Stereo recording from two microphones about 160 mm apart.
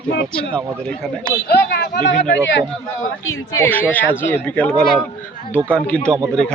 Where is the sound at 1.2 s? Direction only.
90° left.